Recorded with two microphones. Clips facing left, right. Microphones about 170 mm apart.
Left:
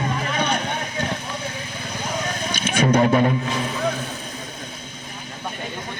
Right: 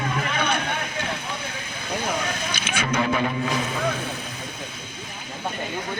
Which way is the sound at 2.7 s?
40° left (ahead or behind).